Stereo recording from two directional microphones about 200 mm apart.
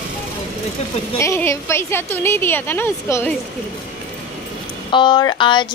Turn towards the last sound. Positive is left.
turn(degrees=25)  # may be behind; listen again after turning